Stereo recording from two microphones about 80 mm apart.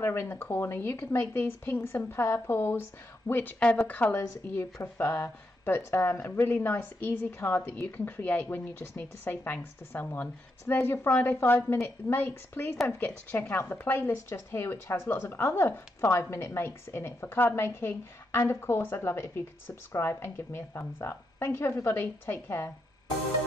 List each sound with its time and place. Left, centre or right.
0.0 s speech: left
4.7 s a woman's voice: left